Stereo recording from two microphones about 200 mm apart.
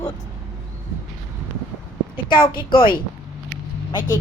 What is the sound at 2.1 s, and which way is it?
Speech, 25° left (ahead or behind).